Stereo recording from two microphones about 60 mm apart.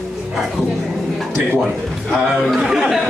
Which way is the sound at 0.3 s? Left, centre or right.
Centre.